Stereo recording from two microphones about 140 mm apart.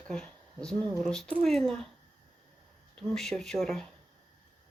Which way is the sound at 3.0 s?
5° left (ahead or behind).